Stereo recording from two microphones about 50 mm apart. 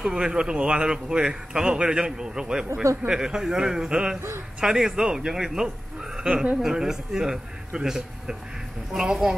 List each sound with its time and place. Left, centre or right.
0.0 s a man's voice: centre
2.7 s speech: right
3.1 s a man's voice: centre
6.1 s speech: right
6.6 s a man's voice: centre